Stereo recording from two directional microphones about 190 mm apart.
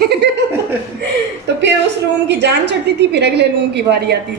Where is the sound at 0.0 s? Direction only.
60° right (ahead or behind).